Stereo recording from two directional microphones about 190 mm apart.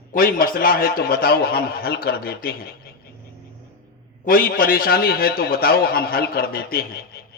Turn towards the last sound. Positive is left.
turn(degrees=55)  # may be behind; listen again after turning